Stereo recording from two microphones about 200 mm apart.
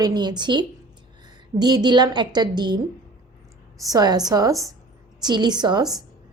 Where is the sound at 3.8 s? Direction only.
20° right (ahead or behind).